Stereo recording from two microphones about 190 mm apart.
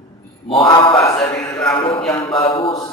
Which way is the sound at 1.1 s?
5° left (ahead or behind).